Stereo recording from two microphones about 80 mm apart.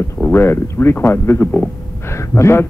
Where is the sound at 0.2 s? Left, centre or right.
Left.